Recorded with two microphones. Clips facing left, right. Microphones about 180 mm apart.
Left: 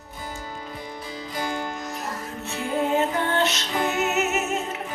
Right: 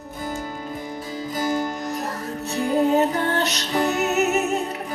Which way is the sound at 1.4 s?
40° right (ahead or behind).